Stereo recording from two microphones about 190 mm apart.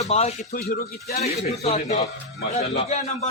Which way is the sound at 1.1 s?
35° left (ahead or behind).